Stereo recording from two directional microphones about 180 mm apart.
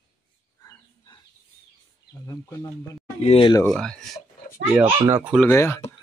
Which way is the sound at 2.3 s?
15° left (ahead or behind).